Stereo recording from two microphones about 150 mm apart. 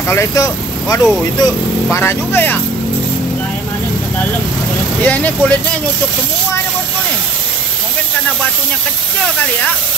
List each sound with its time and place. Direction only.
0.1 s speech: 20° left (ahead or behind)
5.0 s speech: 10° left (ahead or behind)